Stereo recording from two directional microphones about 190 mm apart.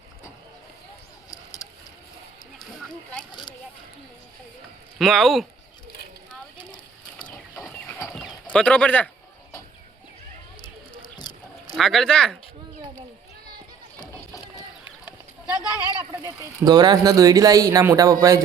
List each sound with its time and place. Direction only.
4.9 s speech: centre (ahead or behind)
7.2 s a sound: 5° left (ahead or behind)
7.9 s horse: 15° left (ahead or behind)
8.5 s speech: 5° left (ahead or behind)
11.2 s a sound: 20° left (ahead or behind)
11.8 s speech: centre (ahead or behind)
14.0 s a sound: 20° left (ahead or behind)
15.6 s speech: 20° left (ahead or behind)
16.1 s speech: 20° right (ahead or behind)